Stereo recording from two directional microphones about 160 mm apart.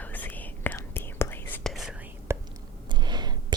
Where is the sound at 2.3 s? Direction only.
15° right (ahead or behind).